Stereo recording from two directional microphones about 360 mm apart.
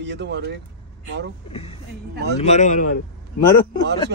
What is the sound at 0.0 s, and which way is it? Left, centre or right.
Speech, right.